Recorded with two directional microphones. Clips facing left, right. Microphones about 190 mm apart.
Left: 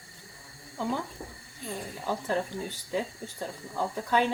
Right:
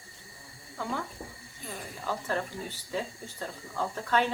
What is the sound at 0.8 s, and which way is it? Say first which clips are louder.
Speech: left 3 dB; 15° left (ahead or behind).